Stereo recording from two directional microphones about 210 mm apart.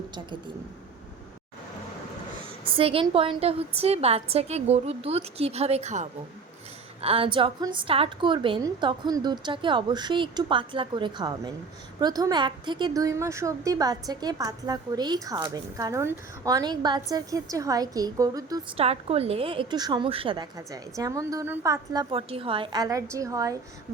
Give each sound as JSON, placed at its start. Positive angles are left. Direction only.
{"t": 2.6, "sound": "a woman's voice", "side_deg": -25}
{"t": 18.9, "sound": "a woman's voice", "side_deg": -30}
{"t": 22.1, "sound": "a woman's voice", "side_deg": -25}